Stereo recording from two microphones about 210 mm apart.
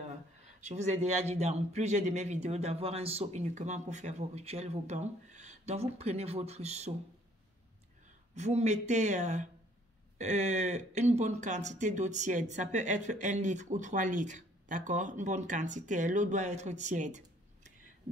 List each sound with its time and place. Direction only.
0.6 s speech: 35° right (ahead or behind)
8.4 s speech: 35° right (ahead or behind)